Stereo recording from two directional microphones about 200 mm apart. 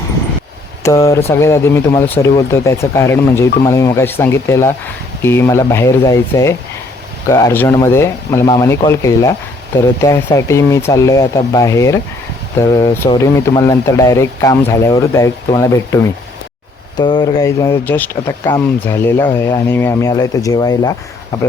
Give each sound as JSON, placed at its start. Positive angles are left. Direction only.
{"t": 0.8, "sound": "speech", "side_deg": 15}
{"t": 17.0, "sound": "speech", "side_deg": 20}